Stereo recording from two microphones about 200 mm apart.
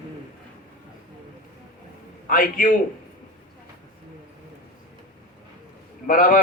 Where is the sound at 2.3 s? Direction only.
45° left (ahead or behind).